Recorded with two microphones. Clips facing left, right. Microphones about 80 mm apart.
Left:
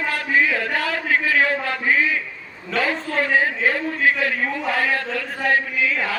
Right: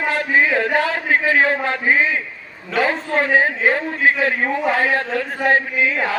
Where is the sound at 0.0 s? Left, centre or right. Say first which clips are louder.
Right 3 dB; right.